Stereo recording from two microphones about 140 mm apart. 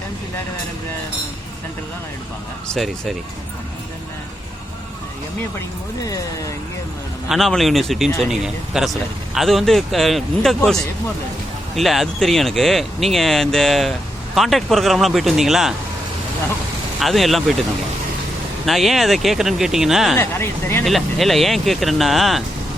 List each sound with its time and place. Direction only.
7.3 s speech: centre (ahead or behind)
11.8 s speech: centre (ahead or behind)
17.0 s speech: centre (ahead or behind)
18.6 s speech: centre (ahead or behind)
20.1 s speech: 15° left (ahead or behind)
20.8 s speech: centre (ahead or behind)